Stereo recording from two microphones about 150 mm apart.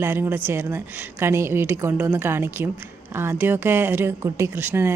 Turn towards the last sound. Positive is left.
turn(degrees=-15)  # may be behind; listen again after turning